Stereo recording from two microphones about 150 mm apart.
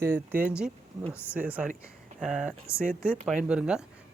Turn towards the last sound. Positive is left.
turn(degrees=-5)  # may be behind; listen again after turning